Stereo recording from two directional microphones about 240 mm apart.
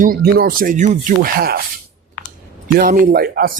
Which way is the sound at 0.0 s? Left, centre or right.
Right.